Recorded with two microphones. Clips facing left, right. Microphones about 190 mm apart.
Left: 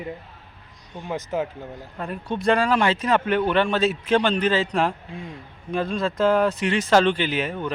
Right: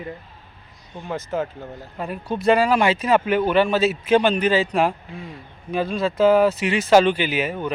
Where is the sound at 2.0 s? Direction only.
5° right (ahead or behind).